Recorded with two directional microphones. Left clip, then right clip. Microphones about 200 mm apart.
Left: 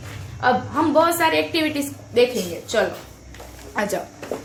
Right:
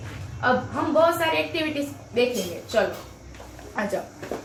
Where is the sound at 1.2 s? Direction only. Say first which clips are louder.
Left 5 dB; 50° left (ahead or behind).